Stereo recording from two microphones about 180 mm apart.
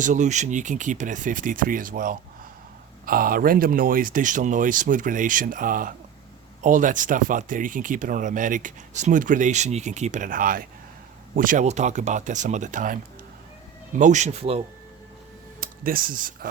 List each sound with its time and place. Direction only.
0.0 s speech: 45° right (ahead or behind)
15.6 s speech: 50° right (ahead or behind)